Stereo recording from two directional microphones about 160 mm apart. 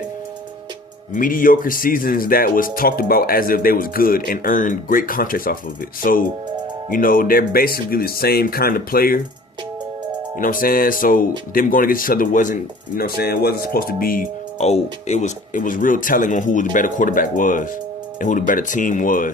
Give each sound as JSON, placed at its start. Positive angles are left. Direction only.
{"t": 1.1, "sound": "speech", "side_deg": 60}
{"t": 10.3, "sound": "speech", "side_deg": 55}
{"t": 13.0, "sound": "speech", "side_deg": 75}
{"t": 14.6, "sound": "speech", "side_deg": 45}